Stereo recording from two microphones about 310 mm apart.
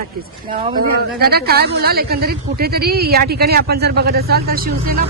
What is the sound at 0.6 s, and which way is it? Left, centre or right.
A woman's voice, right.